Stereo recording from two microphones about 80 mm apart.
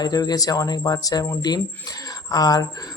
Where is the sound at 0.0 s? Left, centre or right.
Left.